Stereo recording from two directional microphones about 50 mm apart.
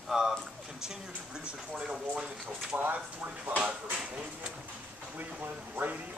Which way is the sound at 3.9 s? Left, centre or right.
Right.